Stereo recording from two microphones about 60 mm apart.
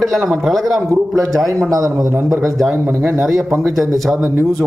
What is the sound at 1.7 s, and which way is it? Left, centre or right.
Speech, right.